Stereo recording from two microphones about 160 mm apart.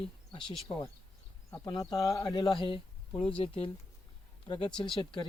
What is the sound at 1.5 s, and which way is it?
Speech, 25° left (ahead or behind).